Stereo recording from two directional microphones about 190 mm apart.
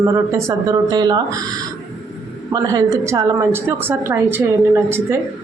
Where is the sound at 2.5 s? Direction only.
15° right (ahead or behind).